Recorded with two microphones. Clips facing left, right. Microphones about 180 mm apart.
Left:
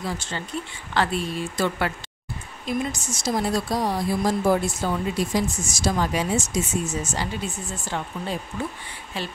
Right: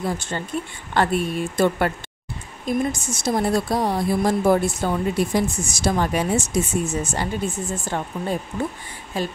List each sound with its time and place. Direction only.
0.0 s a woman's voice: 50° right (ahead or behind)